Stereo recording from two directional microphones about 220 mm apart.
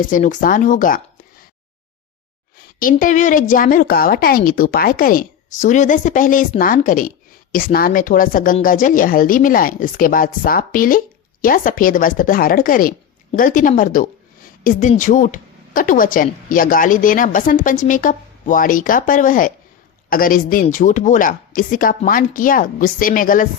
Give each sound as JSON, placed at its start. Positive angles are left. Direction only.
{"t": 0.0, "sound": "speech", "side_deg": 35}
{"t": 2.6, "sound": "speech", "side_deg": 40}